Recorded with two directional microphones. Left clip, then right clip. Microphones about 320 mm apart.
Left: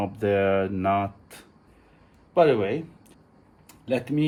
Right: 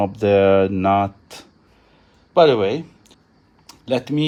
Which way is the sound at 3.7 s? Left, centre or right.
Right.